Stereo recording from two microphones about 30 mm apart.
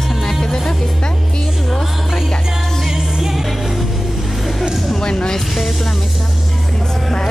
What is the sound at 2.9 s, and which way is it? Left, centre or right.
Music, centre.